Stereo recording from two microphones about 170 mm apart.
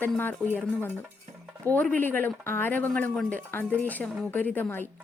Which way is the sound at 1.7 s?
10° left (ahead or behind).